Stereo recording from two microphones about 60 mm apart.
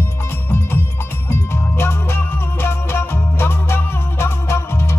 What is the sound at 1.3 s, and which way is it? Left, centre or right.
Music, left.